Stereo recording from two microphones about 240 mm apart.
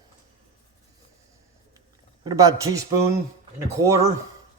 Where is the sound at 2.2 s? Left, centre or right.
Centre.